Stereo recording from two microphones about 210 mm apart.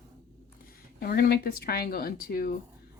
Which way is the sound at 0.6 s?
45° left (ahead or behind).